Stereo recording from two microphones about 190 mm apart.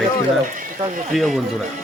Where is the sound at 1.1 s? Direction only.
Centre (ahead or behind).